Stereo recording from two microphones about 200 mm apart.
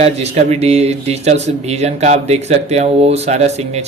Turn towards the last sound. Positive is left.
turn(degrees=-35)  # may be behind; listen again after turning